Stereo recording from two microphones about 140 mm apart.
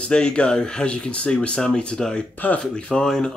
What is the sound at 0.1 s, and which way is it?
Speech, 5° left (ahead or behind).